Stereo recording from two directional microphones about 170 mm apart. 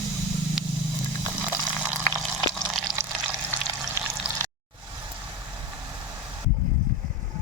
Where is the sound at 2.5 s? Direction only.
Centre (ahead or behind).